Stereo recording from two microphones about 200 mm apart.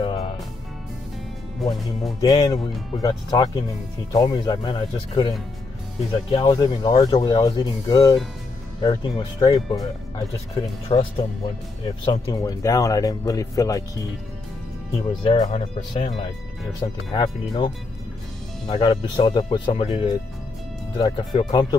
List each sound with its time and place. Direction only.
0.0 s music: 25° left (ahead or behind)
1.6 s speech: centre (ahead or behind)
2.2 s speech: 20° left (ahead or behind)
6.3 s speech: 25° left (ahead or behind)
15.0 s speech: 25° left (ahead or behind)
18.7 s speech: 25° left (ahead or behind)